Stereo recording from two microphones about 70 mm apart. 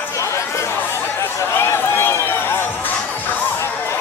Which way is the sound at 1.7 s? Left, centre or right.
Left.